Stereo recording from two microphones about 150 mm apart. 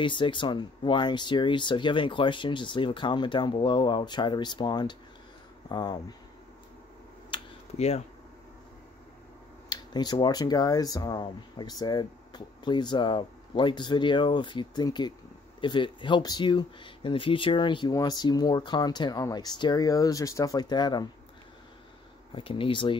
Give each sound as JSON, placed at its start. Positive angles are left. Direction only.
{"t": 0.0, "sound": "speech", "side_deg": 30}
{"t": 7.2, "sound": "computer keyboard", "side_deg": 40}
{"t": 9.7, "sound": "speech", "side_deg": 30}
{"t": 22.3, "sound": "speech", "side_deg": 35}